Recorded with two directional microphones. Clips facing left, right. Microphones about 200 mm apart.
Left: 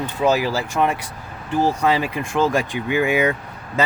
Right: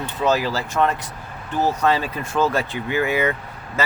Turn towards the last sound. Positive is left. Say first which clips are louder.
# left 2 dB
turn(degrees=15)  # may be behind; listen again after turning